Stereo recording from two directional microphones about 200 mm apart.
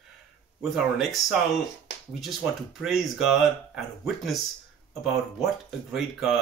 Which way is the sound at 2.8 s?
Centre (ahead or behind).